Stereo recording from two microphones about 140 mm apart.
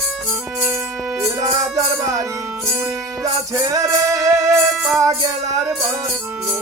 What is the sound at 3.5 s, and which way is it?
Music, 25° right (ahead or behind).